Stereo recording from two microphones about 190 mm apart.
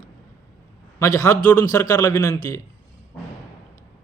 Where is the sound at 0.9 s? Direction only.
15° left (ahead or behind).